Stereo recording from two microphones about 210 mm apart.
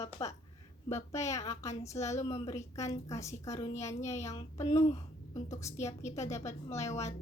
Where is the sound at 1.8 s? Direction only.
15° left (ahead or behind).